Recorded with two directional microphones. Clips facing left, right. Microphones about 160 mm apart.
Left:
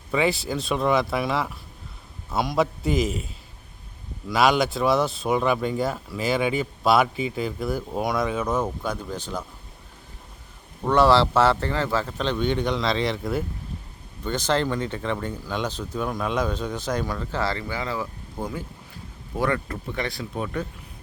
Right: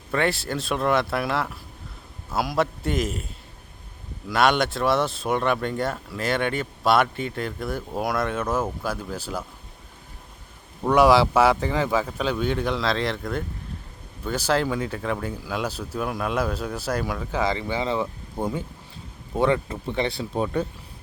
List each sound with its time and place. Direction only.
0.1 s speech: centre (ahead or behind)
10.8 s speech: 10° right (ahead or behind); by 20.7 s 30° right (ahead or behind)